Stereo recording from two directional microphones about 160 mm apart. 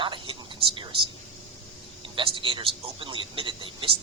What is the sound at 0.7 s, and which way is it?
Speech, 30° right (ahead or behind).